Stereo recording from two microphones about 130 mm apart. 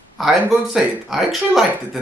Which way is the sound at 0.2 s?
Centre (ahead or behind).